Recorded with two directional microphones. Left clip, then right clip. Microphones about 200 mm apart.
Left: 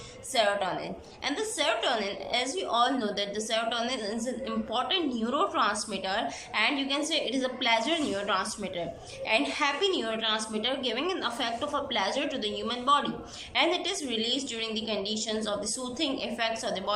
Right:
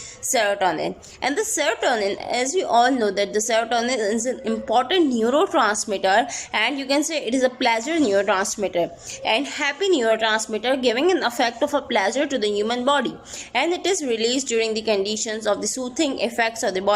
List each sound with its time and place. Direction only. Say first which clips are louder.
0.3 s a woman's voice: right 7 dB; 40° right (ahead or behind)